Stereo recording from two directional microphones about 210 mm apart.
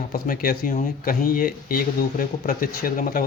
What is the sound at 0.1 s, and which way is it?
Speech, 45° left (ahead or behind).